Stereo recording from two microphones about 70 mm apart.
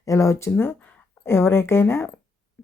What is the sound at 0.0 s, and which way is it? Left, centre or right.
Speech, left.